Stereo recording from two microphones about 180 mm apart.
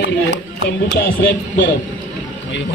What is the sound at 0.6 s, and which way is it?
Speech, 70° left (ahead or behind).